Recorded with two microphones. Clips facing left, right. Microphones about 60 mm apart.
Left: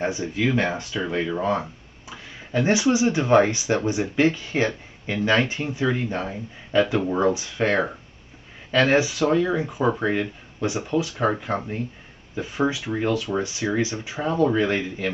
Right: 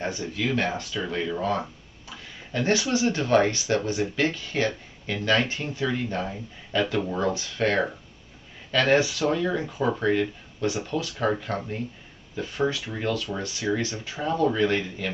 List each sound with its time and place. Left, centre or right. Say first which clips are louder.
0.0 s speech: left 5 dB; centre